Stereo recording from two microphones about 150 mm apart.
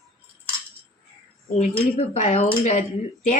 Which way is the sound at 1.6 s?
45° left (ahead or behind).